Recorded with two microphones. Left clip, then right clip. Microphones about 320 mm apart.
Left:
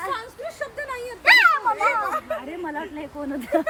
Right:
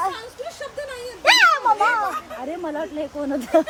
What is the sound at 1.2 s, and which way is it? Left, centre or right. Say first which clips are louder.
Speech: even; centre.